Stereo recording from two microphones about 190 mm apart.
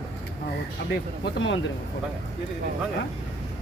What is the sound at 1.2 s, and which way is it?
Speech, 75° left (ahead or behind).